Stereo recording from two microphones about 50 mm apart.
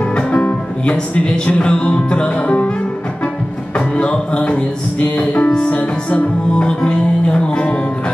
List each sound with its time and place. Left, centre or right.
0.1 s music: left
3.7 s music: left